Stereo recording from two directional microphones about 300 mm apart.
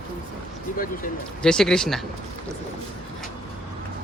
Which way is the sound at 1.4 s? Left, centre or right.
Centre.